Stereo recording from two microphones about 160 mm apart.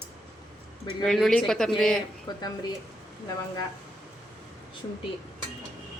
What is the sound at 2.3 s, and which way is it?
Speech, 25° left (ahead or behind).